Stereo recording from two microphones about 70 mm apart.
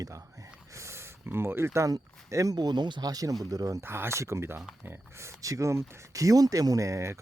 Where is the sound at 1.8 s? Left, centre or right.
Right.